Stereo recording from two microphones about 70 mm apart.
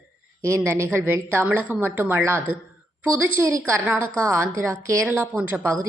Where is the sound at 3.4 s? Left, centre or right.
Right.